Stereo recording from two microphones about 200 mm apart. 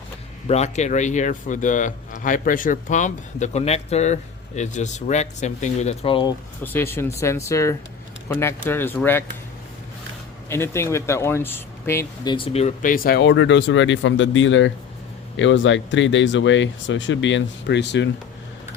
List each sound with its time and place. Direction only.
0.4 s speech: 35° left (ahead or behind)
6.6 s speech: 10° left (ahead or behind)
10.5 s speech: 15° left (ahead or behind); by 18.1 s 60° left (ahead or behind)